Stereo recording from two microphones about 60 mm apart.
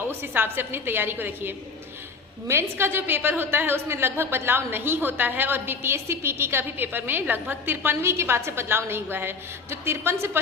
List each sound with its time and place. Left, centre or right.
0.1 s a woman's voice: right